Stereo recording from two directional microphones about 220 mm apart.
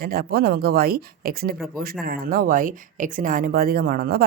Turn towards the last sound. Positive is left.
turn(degrees=-45)  # may be behind; listen again after turning